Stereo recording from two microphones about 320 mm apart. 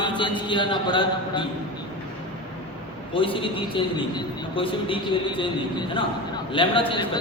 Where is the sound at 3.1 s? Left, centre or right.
Centre.